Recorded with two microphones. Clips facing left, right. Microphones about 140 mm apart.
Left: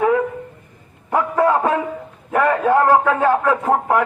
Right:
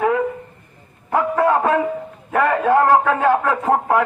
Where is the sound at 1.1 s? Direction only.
20° left (ahead or behind).